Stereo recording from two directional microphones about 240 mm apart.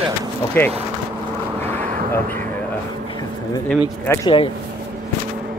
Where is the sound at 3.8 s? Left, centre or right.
Centre.